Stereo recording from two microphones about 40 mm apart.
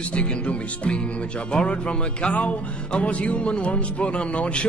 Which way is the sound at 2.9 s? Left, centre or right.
Left.